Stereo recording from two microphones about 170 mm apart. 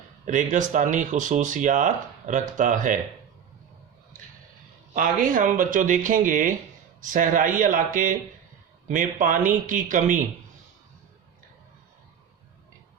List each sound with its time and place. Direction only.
0.3 s speech: 50° right (ahead or behind)
4.9 s speech: 55° right (ahead or behind)